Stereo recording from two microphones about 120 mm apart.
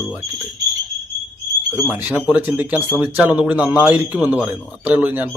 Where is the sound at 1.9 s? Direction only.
10° right (ahead or behind).